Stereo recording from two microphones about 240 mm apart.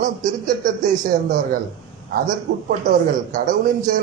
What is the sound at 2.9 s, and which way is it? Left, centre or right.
Speech, right.